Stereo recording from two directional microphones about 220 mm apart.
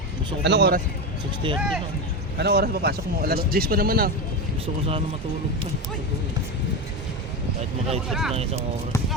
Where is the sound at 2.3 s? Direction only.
45° right (ahead or behind).